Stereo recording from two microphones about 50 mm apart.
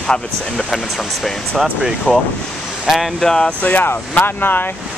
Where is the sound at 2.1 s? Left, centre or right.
Left.